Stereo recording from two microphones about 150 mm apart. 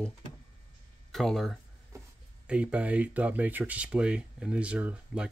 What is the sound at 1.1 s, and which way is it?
Speech, centre (ahead or behind).